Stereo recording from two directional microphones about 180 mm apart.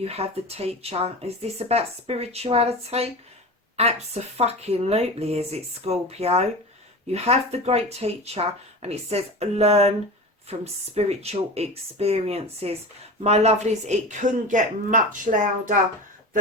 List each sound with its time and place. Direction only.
0.0 s a woman's voice: 35° right (ahead or behind)